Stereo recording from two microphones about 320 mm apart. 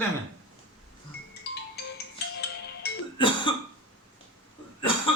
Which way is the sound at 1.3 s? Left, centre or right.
Left.